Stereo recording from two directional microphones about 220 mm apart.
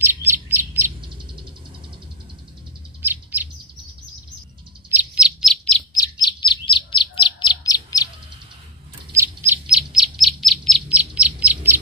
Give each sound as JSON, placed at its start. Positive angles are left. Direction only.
{"t": 0.0, "sound": "bird", "side_deg": -10}
{"t": 3.0, "sound": "bird", "side_deg": -10}
{"t": 4.9, "sound": "bird", "side_deg": -5}
{"t": 5.9, "sound": "chirp", "side_deg": 20}
{"t": 9.5, "sound": "bird", "side_deg": -5}